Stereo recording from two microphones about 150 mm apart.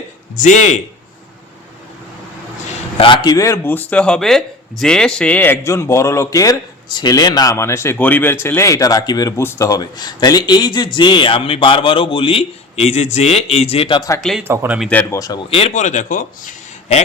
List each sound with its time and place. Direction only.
0.3 s speech: 55° left (ahead or behind)
3.0 s speech: 30° left (ahead or behind)
14.2 s speech: centre (ahead or behind)
14.4 s speech: 15° right (ahead or behind)
14.8 s speech: 10° left (ahead or behind)
15.4 s speech: 40° left (ahead or behind); by 17.0 s 60° left (ahead or behind)